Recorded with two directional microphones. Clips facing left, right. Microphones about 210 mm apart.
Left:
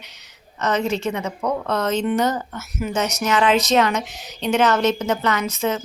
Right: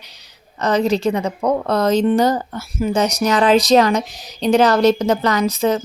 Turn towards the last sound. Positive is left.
turn(degrees=-35)  # may be behind; listen again after turning